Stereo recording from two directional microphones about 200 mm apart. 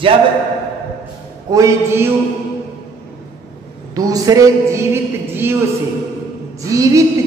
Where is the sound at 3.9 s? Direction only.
20° right (ahead or behind).